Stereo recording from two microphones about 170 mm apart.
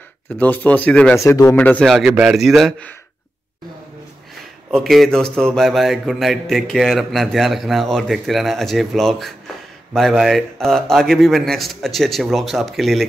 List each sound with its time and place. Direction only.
0.3 s speech: 10° left (ahead or behind)
1.2 s speech: 20° left (ahead or behind)
1.6 s a man's voice: 5° left (ahead or behind)
4.6 s a man's voice: centre (ahead or behind)